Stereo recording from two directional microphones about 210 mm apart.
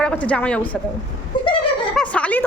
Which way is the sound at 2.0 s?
5° left (ahead or behind).